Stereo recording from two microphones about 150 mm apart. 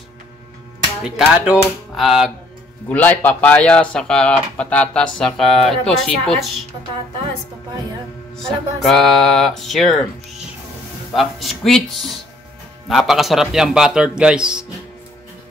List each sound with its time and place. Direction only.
1.0 s speech: 5° right (ahead or behind)
2.9 s speech: 10° left (ahead or behind)
8.4 s speech: 5° left (ahead or behind)
11.1 s speech: centre (ahead or behind)